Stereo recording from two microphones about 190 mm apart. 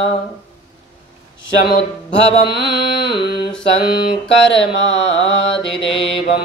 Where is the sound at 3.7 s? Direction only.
25° left (ahead or behind).